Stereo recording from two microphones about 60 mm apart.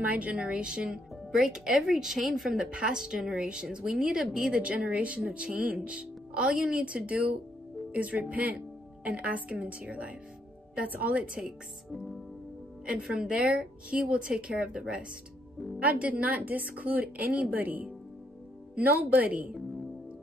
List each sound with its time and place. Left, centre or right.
0.0 s a woman's voice: right; by 2.6 s centre
2.6 s a woman's voice: centre
13.0 s a woman's voice: centre